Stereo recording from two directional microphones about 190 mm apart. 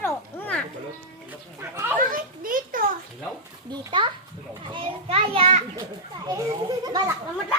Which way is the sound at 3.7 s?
25° right (ahead or behind).